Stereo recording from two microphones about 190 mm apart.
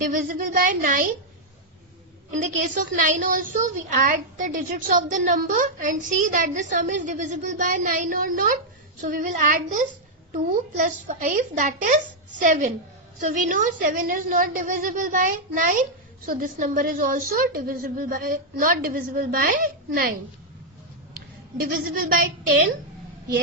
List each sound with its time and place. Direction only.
0.1 s a woman's voice: 45° right (ahead or behind)
2.4 s a woman's voice: 45° right (ahead or behind)
21.6 s a woman's voice: 50° right (ahead or behind)